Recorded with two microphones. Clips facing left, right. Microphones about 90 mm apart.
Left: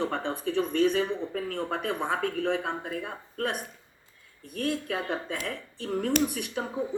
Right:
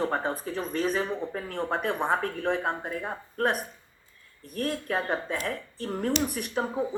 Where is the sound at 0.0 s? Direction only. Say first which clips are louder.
Right 1 dB; 40° right (ahead or behind).